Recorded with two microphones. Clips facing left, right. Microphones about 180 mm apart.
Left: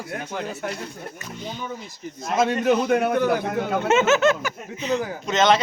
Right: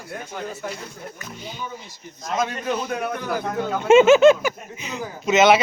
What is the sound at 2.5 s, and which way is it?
Speech, 70° left (ahead or behind).